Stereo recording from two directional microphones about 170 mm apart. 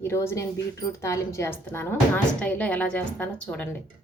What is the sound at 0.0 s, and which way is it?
Speech, 15° left (ahead or behind).